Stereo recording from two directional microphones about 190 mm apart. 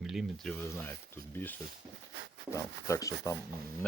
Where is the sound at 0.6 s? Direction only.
10° left (ahead or behind).